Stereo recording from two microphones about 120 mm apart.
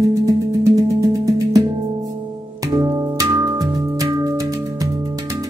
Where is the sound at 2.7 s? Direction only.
30° right (ahead or behind).